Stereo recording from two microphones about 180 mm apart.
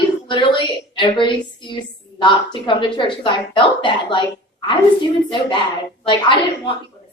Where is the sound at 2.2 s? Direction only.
25° left (ahead or behind).